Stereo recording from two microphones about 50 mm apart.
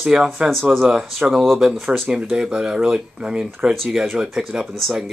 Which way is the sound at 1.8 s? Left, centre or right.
Centre.